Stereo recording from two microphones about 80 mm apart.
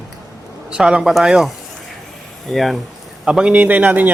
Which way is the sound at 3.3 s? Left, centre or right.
Centre.